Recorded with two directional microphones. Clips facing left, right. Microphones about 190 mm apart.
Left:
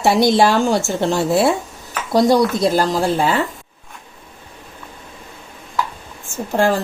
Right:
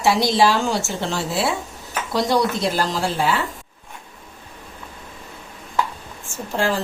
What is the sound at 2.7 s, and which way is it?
Speech, 45° left (ahead or behind).